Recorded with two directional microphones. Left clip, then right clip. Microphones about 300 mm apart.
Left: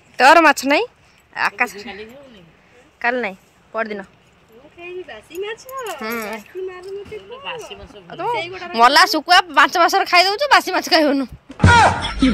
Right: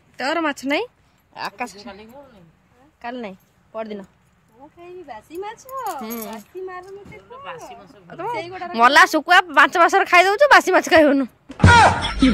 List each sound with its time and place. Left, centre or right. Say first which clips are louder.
0.1 s speech: left 12 dB; centre
3.0 s a woman's voice: left 11 dB; centre
7.9 s speech: left 5 dB; centre